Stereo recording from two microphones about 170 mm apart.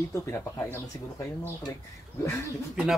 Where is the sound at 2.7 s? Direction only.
5° right (ahead or behind).